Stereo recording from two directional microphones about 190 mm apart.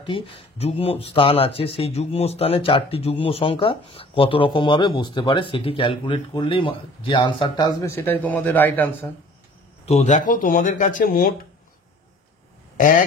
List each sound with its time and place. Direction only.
0.0 s speech: 30° left (ahead or behind)
7.9 s speech: 10° left (ahead or behind)
9.8 s speech: 35° left (ahead or behind)
12.7 s speech: 45° left (ahead or behind)